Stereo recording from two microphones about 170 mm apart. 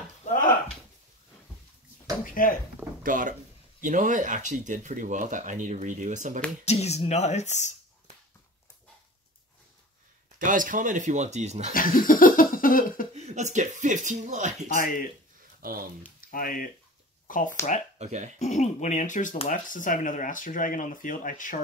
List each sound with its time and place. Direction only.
0.2 s a sound: 50° left (ahead or behind)
2.2 s speech: 55° left (ahead or behind)
3.0 s speech: 50° right (ahead or behind)
6.6 s speech: 40° left (ahead or behind)
10.4 s speech: 50° right (ahead or behind)
11.7 s speech: 55° left (ahead or behind)
13.1 s speech: 40° right (ahead or behind)
14.7 s speech: 55° left (ahead or behind)
15.6 s speech: 60° right (ahead or behind)
16.2 s speech: 55° left (ahead or behind)
17.9 s speech: 40° right (ahead or behind)
18.4 s speech: 40° left (ahead or behind)